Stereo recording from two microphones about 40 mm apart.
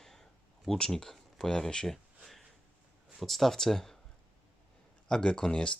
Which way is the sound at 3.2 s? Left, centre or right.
Centre.